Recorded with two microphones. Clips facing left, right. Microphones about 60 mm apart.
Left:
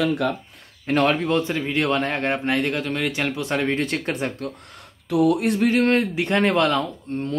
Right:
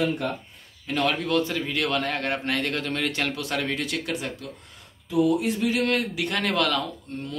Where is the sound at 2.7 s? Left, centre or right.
Centre; by 4.5 s left.